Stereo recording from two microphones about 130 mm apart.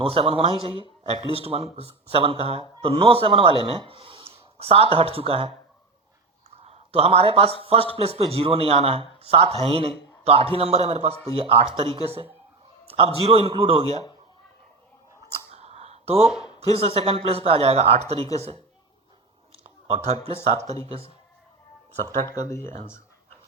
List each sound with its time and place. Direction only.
0.0 s speech: 45° right (ahead or behind)
15.5 s a sound: 55° right (ahead or behind)
16.2 s speech: 5° right (ahead or behind)
16.6 s speech: 50° right (ahead or behind)
19.9 s speech: 50° right (ahead or behind)
22.4 s speech: 20° left (ahead or behind)